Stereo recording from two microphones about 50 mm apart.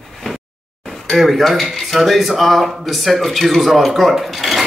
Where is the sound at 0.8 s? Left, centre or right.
Centre.